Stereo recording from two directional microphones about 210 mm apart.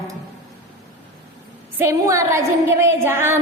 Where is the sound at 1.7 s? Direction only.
15° right (ahead or behind).